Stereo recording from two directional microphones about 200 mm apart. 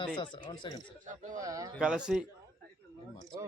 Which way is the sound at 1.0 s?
40° right (ahead or behind).